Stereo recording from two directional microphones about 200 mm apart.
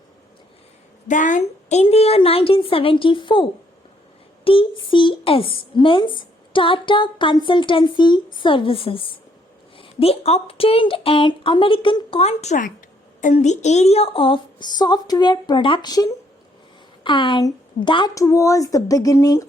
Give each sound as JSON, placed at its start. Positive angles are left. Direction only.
{"t": 1.0, "sound": "a woman's voice", "side_deg": 40}